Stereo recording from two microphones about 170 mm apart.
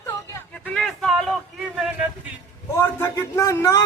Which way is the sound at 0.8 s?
Centre (ahead or behind).